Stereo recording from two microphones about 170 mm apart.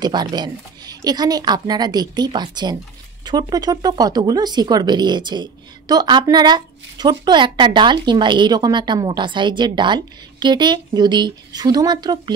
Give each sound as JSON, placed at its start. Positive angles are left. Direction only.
{"t": 0.0, "sound": "speech", "side_deg": -25}